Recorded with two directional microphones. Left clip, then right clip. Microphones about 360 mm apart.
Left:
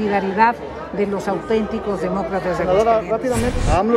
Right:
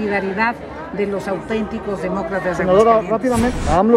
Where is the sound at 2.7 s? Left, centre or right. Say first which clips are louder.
Right 4 dB; right.